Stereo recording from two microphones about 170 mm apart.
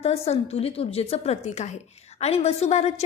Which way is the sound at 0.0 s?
35° left (ahead or behind).